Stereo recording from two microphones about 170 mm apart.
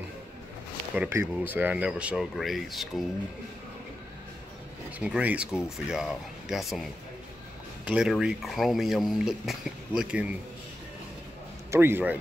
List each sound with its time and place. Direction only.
0.9 s speech: 10° right (ahead or behind)
4.9 s speech: 5° right (ahead or behind)
11.7 s speech: 15° right (ahead or behind)